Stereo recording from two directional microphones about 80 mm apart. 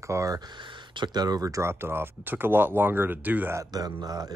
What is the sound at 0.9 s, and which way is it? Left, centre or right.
Speech, right.